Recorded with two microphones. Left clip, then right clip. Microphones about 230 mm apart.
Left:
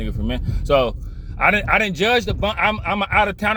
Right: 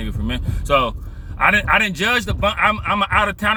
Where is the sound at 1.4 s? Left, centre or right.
Right.